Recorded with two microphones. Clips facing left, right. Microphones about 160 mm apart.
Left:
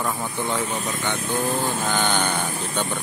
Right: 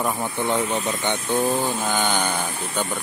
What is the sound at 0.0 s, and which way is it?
Speech, 20° right (ahead or behind).